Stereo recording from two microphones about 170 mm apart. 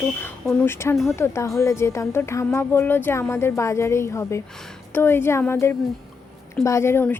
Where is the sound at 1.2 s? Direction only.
15° left (ahead or behind).